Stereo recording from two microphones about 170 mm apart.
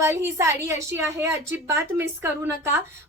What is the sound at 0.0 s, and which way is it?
A woman's voice, 15° right (ahead or behind).